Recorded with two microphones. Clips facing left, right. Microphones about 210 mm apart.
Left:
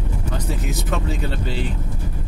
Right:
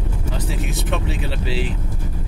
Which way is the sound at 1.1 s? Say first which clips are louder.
Even; 90° right.